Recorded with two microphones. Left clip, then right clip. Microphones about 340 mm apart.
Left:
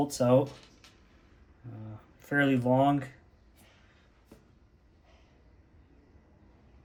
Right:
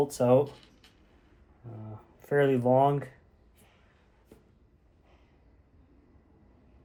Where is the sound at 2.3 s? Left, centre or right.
Centre.